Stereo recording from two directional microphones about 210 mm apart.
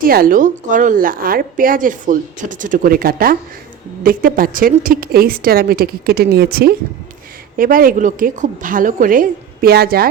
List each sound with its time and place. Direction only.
0.0 s a woman's voice: 45° right (ahead or behind)